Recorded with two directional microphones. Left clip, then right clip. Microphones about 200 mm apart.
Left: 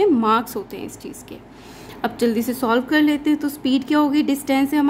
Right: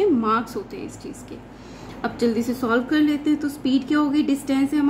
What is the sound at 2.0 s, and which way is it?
A woman's voice, 50° left (ahead or behind).